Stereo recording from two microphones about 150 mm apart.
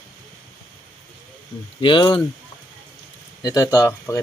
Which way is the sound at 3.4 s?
25° left (ahead or behind).